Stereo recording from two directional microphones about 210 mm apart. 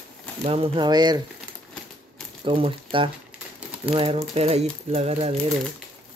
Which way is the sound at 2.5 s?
25° right (ahead or behind).